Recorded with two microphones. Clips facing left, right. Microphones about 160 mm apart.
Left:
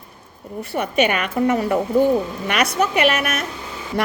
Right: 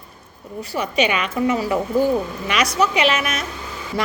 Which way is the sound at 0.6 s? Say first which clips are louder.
Left 1 dB; 60° left (ahead or behind).